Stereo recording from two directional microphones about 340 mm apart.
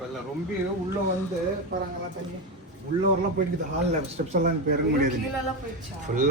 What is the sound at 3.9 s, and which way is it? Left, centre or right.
Speech, right.